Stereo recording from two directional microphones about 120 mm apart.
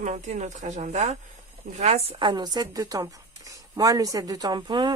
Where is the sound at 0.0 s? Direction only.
85° right.